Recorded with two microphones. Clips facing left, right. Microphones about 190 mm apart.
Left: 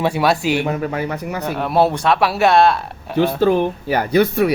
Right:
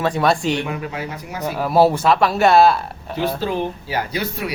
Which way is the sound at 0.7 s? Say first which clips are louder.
Left 5 dB; 45° left (ahead or behind).